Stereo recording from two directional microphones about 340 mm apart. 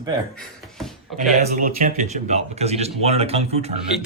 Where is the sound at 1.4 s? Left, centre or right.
Right.